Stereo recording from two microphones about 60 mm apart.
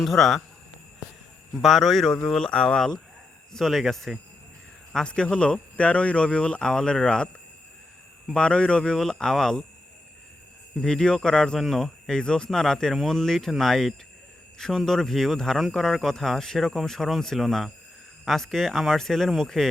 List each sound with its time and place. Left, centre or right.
0.0 s speech: centre
1.6 s a man's voice: centre
3.5 s a man's voice: centre
8.3 s a man's voice: centre
10.8 s a man's voice: centre